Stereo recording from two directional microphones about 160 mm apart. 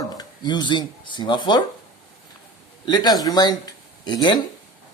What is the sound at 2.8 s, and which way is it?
Speech, 25° left (ahead or behind).